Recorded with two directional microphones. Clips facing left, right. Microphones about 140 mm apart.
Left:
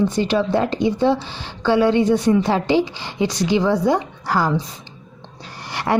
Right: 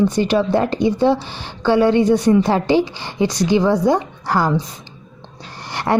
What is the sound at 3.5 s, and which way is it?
Speech, 40° right (ahead or behind).